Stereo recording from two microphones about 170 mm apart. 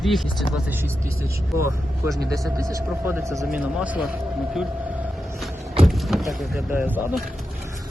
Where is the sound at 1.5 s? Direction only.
15° right (ahead or behind).